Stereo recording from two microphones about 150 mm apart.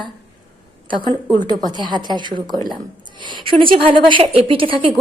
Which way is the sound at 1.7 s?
30° right (ahead or behind).